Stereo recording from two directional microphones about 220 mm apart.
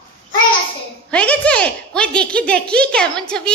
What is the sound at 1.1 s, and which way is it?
A woman's voice, 5° left (ahead or behind).